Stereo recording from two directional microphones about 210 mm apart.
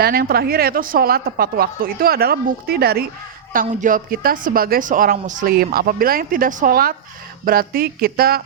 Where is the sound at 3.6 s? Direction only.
35° right (ahead or behind).